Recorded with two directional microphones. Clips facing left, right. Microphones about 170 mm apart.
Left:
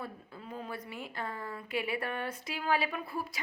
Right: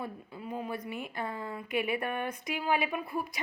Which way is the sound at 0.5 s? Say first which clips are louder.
Right 5 dB; 15° right (ahead or behind).